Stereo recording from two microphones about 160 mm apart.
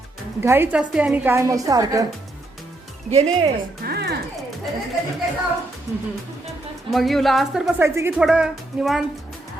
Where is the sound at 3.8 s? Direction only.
85° right.